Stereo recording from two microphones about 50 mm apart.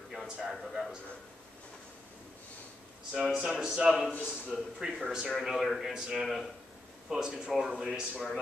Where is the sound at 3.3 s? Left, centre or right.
Centre.